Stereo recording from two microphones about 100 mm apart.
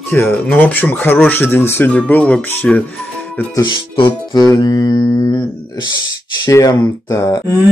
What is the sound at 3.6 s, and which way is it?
Speech, 50° left (ahead or behind).